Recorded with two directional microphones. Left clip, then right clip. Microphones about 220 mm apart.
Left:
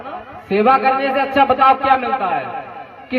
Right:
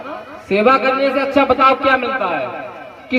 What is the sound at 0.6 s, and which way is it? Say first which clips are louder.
Speech: even; 35° left (ahead or behind).